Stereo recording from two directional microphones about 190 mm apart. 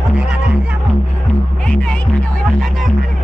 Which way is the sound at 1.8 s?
5° left (ahead or behind).